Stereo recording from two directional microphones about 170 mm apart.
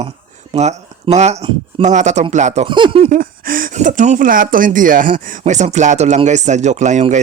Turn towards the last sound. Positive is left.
turn(degrees=-45)  # may be behind; listen again after turning